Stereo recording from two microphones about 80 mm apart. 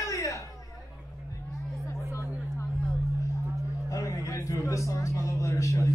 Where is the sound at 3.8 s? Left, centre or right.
Left.